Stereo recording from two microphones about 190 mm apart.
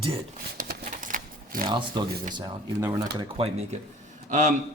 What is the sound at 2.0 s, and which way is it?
Speech, 55° right (ahead or behind).